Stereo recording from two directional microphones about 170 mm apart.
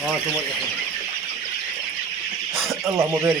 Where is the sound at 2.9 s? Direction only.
15° right (ahead or behind).